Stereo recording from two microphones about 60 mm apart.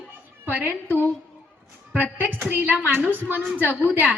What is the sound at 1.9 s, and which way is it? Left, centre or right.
A woman's voice, right.